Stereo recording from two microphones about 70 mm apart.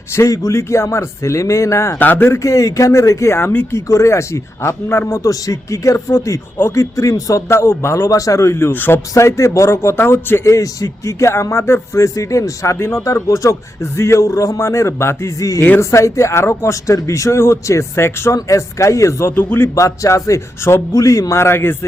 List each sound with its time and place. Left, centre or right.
0.2 s speech: left
2.0 s speech: left
2.4 s speech: left
3.8 s speech: left
9.1 s speech: left
10.4 s speech: left
15.4 s speech: left
19.4 s speech: left
19.7 s speech: left